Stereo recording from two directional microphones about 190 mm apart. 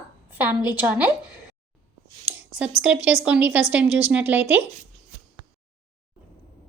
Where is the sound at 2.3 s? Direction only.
10° right (ahead or behind).